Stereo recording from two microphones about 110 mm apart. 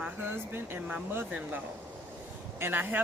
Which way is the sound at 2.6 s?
20° right (ahead or behind).